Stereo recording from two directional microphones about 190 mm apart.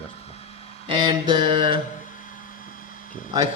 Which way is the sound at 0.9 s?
25° right (ahead or behind).